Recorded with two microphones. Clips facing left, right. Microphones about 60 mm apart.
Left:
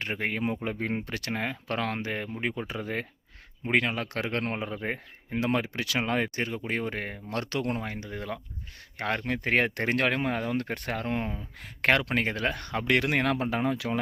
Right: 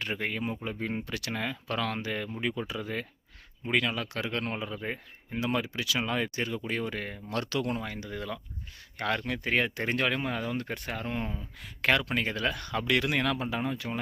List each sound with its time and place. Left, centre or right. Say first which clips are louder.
0.0 s speech: left 2 dB; left
13.7 s speech: left 5 dB; left